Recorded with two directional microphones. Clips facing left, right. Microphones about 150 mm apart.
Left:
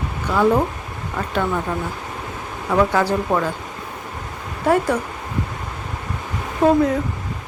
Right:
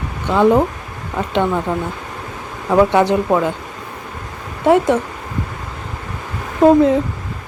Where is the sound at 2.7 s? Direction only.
25° right (ahead or behind).